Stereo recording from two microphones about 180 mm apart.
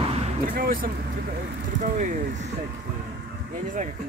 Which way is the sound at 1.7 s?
90° right.